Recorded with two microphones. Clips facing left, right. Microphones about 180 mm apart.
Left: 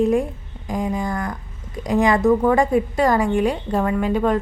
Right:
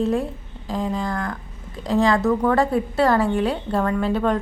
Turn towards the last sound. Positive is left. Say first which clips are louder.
# left 2 dB
turn(degrees=10)  # may be behind; listen again after turning